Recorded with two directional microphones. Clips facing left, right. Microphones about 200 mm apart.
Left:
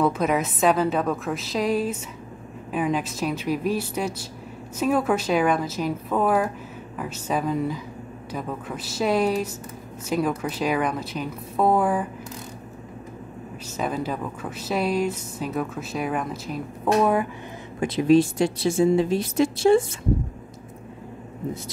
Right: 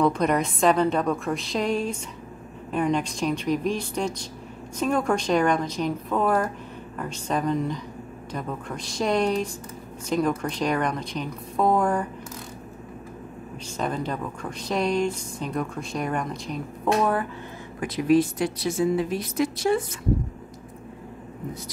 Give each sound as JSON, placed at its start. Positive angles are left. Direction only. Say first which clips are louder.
{"t": 0.0, "sound": "speech", "louder": "even", "side_deg": 5}
{"t": 13.7, "sound": "speech", "louder": "left 1 dB", "side_deg": 5}
{"t": 17.7, "sound": "a woman's voice", "louder": "left 3 dB", "side_deg": 25}